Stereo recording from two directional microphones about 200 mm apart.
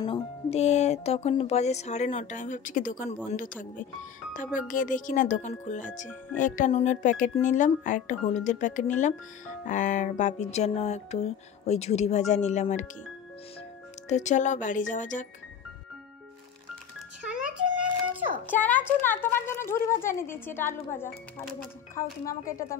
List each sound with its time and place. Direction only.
0.0 s speech: 25° left (ahead or behind)
4.6 s speech: 40° left (ahead or behind)
14.0 s speech: 35° left (ahead or behind)
17.3 s a sound: 5° right (ahead or behind)
18.5 s speech: 10° left (ahead or behind)
22.2 s a woman's voice: 45° left (ahead or behind)